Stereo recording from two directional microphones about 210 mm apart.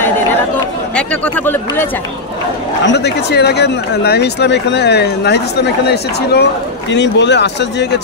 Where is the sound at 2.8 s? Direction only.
55° left (ahead or behind).